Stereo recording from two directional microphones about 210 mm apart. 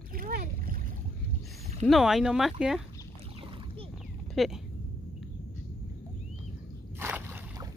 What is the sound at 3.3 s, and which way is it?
Boat, 25° right (ahead or behind).